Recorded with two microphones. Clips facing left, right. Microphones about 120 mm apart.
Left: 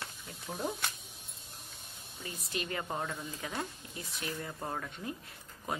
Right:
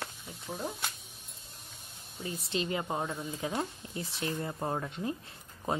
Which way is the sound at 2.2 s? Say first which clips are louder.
Right 5 dB; 25° right (ahead or behind).